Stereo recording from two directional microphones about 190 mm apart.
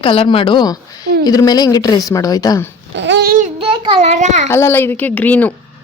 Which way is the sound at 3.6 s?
30° right (ahead or behind).